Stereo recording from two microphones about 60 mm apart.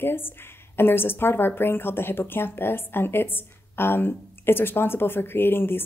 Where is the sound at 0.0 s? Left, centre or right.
Left.